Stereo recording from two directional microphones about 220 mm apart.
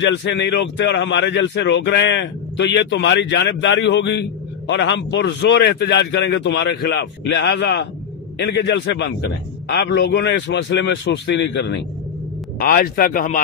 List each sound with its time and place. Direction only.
0.1 s speech: 50° left (ahead or behind)
12.5 s speech: 40° left (ahead or behind)